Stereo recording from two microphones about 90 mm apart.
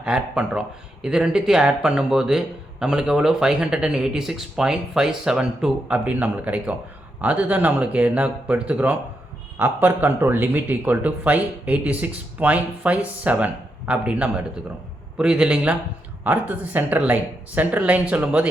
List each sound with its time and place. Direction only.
0.0 s a man's voice: 10° right (ahead or behind)